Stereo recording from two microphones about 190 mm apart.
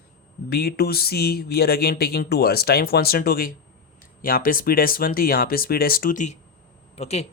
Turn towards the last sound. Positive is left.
turn(degrees=35)  # may be behind; listen again after turning